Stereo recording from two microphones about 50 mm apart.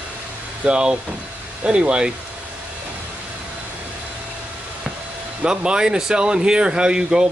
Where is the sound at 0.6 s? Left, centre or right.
Right.